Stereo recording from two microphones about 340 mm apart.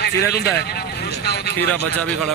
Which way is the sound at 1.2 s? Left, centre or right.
Left.